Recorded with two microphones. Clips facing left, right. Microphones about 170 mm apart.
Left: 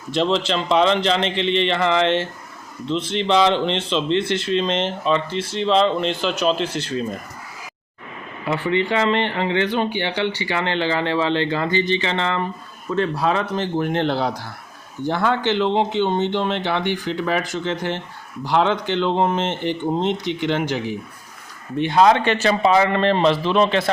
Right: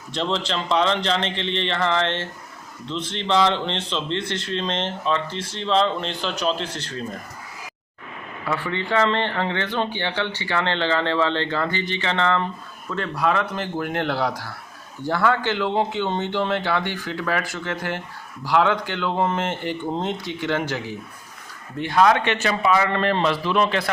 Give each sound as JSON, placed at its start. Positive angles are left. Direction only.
{"t": 0.3, "sound": "speech", "side_deg": 5}
{"t": 1.5, "sound": "a sound", "side_deg": 90}
{"t": 1.7, "sound": "speech", "side_deg": 5}
{"t": 3.7, "sound": "speech", "side_deg": 5}
{"t": 8.4, "sound": "speech", "side_deg": 20}